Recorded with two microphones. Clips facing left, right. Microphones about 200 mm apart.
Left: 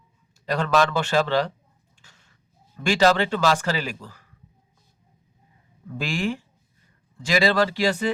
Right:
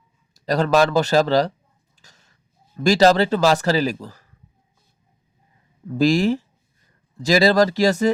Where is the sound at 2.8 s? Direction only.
40° right (ahead or behind).